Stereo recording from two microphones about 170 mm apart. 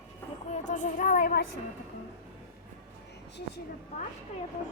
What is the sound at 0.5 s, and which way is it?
Speech, 45° left (ahead or behind).